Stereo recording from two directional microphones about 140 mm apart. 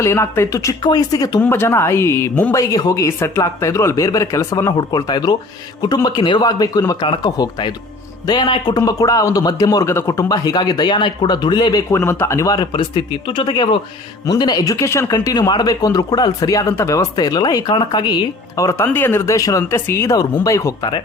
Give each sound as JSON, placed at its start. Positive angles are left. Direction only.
{"t": 0.0, "sound": "a man's voice", "side_deg": 20}